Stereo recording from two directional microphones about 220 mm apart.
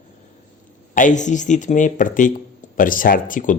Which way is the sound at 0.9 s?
35° left (ahead or behind).